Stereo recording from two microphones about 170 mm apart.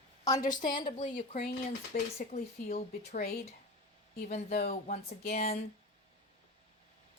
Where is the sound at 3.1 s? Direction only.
60° left (ahead or behind).